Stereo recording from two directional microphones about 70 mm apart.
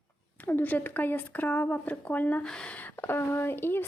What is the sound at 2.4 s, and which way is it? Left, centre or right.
Speech, centre.